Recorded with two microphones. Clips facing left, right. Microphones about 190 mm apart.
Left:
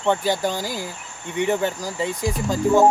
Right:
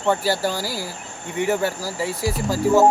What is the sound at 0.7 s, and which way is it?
Speech, 20° left (ahead or behind).